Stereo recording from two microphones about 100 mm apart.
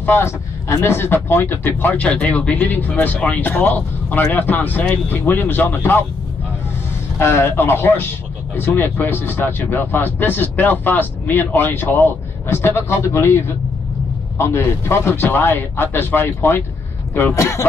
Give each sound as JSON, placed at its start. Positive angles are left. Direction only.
{"t": 0.0, "sound": "speech", "side_deg": 20}
{"t": 7.2, "sound": "speech", "side_deg": 25}